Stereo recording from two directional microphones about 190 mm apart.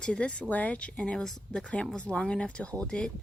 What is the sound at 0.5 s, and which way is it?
A woman's voice, 5° left (ahead or behind).